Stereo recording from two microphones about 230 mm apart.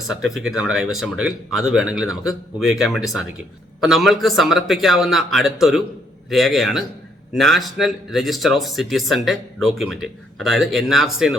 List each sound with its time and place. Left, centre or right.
0.1 s speech: centre